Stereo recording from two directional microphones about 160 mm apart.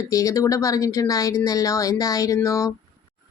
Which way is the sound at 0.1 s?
20° left (ahead or behind).